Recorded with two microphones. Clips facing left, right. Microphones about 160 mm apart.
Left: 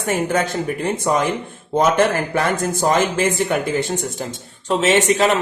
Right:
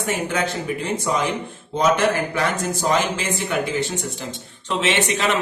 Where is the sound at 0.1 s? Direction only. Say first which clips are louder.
Left 5 dB; 45° left (ahead or behind).